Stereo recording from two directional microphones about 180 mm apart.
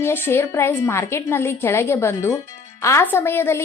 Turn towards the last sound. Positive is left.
turn(degrees=15)  # may be behind; listen again after turning